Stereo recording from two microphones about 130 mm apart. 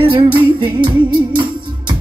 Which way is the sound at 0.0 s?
40° right (ahead or behind).